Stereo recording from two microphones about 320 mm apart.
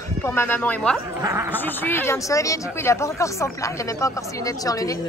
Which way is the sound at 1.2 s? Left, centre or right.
Centre.